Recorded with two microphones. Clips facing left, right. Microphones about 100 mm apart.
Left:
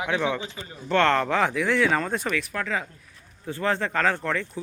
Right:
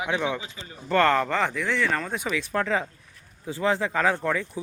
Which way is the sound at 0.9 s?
5° right (ahead or behind).